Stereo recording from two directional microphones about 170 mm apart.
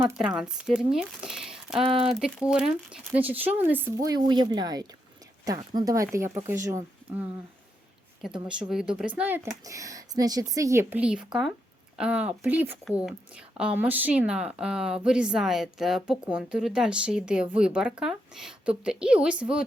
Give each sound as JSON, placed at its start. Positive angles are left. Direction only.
{"t": 0.2, "sound": "speech", "side_deg": -5}
{"t": 1.8, "sound": "speech", "side_deg": -30}
{"t": 2.2, "sound": "speech", "side_deg": -5}
{"t": 8.2, "sound": "speech", "side_deg": -5}